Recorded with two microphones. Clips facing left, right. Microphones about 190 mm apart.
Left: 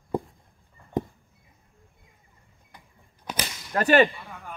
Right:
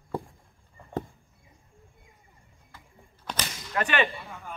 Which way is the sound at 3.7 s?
40° left (ahead or behind).